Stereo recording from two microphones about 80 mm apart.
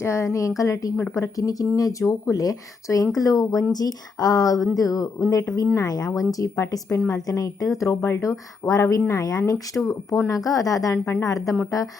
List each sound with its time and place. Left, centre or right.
0.0 s speech: left
10.9 s speech: left
11.2 s speech: left